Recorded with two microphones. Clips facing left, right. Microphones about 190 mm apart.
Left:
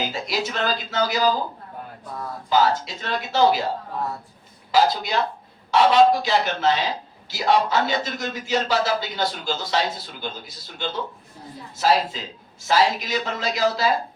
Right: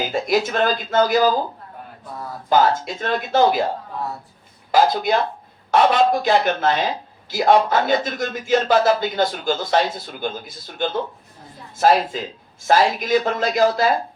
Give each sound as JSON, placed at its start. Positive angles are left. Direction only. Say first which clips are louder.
{"t": 0.1, "sound": "speech", "louder": "right 7 dB", "side_deg": -50}
{"t": 2.5, "sound": "speech", "louder": "right 3 dB", "side_deg": -50}
{"t": 4.7, "sound": "speech", "louder": "right 3 dB", "side_deg": -50}